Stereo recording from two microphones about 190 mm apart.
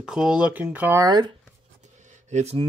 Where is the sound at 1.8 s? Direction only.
40° right (ahead or behind).